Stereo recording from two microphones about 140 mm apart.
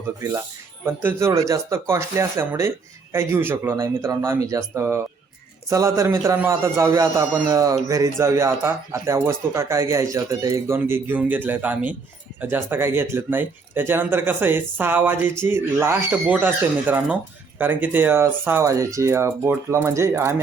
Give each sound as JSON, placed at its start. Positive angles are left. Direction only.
{"t": 0.9, "sound": "a man's voice", "side_deg": -15}